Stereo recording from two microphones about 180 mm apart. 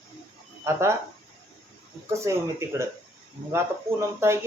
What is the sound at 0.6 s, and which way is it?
Speech, 15° right (ahead or behind).